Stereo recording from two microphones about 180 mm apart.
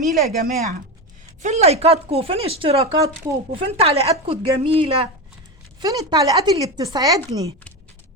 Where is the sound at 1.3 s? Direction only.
40° right (ahead or behind).